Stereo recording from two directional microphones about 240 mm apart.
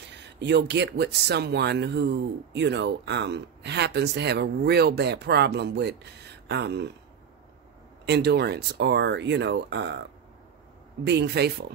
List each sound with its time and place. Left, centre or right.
0.4 s speech: right
8.1 s speech: right
11.1 s speech: right